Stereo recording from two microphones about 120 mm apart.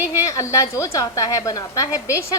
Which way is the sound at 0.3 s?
25° left (ahead or behind).